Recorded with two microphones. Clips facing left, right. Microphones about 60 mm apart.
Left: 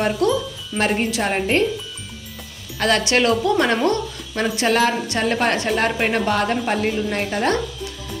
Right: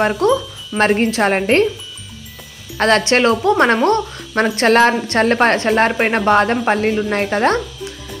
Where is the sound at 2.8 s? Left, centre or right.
Right.